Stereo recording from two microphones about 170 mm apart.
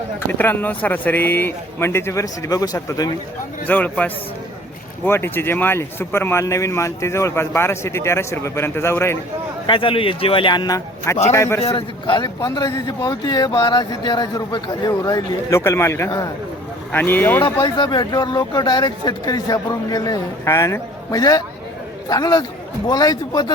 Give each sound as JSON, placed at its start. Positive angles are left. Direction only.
{"t": 0.3, "sound": "a man's voice", "side_deg": 10}
{"t": 3.7, "sound": "a man's voice", "side_deg": 10}
{"t": 9.6, "sound": "a man's voice", "side_deg": 30}
{"t": 11.7, "sound": "a man's voice", "side_deg": 25}
{"t": 17.4, "sound": "speech", "side_deg": 25}